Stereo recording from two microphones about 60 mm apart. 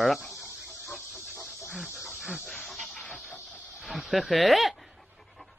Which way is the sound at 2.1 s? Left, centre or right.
Centre.